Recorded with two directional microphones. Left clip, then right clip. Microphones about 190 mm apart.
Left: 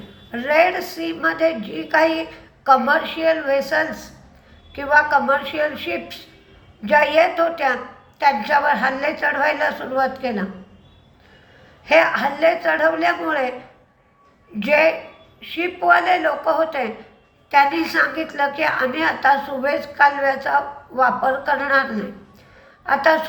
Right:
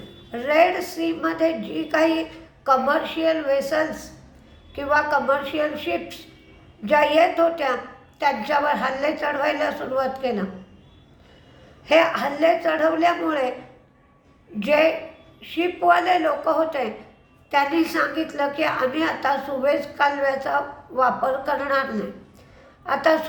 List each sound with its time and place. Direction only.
0.3 s a woman's voice: 15° right (ahead or behind)
11.9 s a woman's voice: 15° right (ahead or behind)
14.6 s a woman's voice: 15° right (ahead or behind)